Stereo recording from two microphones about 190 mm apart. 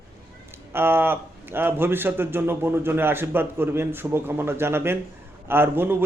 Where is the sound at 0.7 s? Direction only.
10° right (ahead or behind).